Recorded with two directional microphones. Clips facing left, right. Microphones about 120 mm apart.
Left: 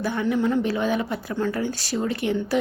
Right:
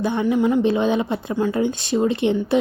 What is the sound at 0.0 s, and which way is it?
Speech, 20° right (ahead or behind).